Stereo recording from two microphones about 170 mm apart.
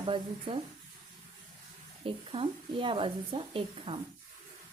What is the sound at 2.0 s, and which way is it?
A woman's voice, 30° right (ahead or behind).